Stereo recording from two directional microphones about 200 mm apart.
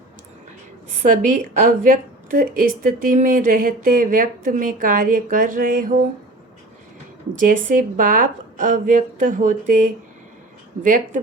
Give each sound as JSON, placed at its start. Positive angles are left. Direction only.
{"t": 1.0, "sound": "speech", "side_deg": -40}
{"t": 7.3, "sound": "speech", "side_deg": -40}